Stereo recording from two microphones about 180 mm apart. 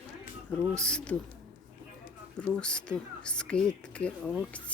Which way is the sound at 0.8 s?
5° left (ahead or behind).